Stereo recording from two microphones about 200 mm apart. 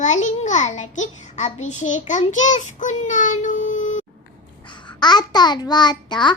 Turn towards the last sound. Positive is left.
turn(degrees=20)  # may be behind; listen again after turning